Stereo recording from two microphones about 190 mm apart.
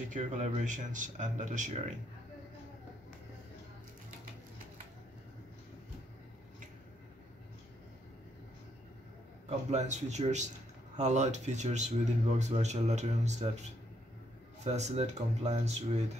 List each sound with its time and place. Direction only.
0.1 s speech: 40° right (ahead or behind)
9.5 s speech: 35° right (ahead or behind)